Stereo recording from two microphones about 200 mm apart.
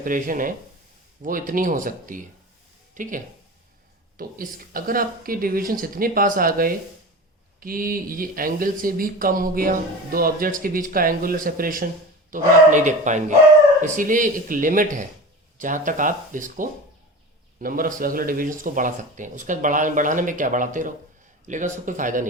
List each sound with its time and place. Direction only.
0.0 s speech: 45° right (ahead or behind)